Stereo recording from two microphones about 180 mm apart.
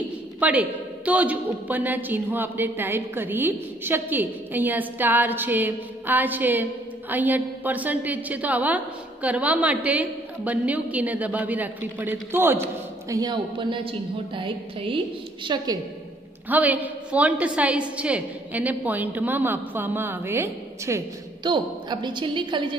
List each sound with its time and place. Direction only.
0.4 s a woman's voice: 10° right (ahead or behind)
13.1 s a woman's voice: 20° right (ahead or behind)
16.4 s a woman's voice: 10° right (ahead or behind)
21.5 s a woman's voice: 25° right (ahead or behind)